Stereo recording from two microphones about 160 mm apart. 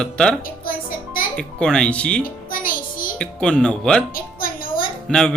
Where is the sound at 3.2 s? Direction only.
5° left (ahead or behind).